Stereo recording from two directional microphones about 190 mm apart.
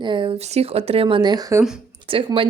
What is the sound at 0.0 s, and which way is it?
A woman's voice, 25° right (ahead or behind).